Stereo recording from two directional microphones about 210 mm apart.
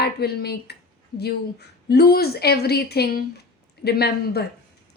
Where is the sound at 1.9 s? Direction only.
50° left (ahead or behind).